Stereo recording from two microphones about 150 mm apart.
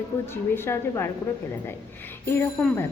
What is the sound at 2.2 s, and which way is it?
Speech, 15° left (ahead or behind).